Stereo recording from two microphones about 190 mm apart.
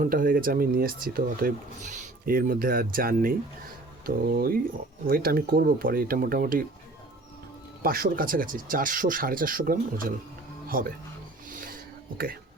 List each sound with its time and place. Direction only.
0.0 s speech: 45° right (ahead or behind)
7.8 s speech: 50° right (ahead or behind)
11.5 s a sound: 45° right (ahead or behind)